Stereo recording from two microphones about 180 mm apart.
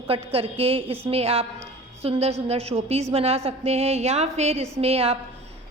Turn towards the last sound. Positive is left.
turn(degrees=-35)  # may be behind; listen again after turning